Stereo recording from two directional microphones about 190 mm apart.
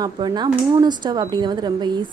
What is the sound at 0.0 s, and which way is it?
A woman's voice, 20° right (ahead or behind).